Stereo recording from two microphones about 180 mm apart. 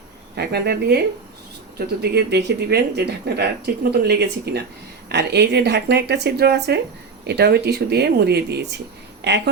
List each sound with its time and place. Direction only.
0.3 s speech: 65° right (ahead or behind)